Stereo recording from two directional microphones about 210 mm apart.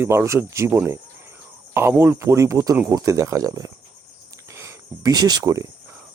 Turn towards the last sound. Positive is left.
turn(degrees=-15)  # may be behind; listen again after turning